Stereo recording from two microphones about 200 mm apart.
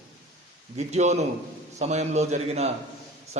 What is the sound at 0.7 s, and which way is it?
A man's voice, 35° right (ahead or behind).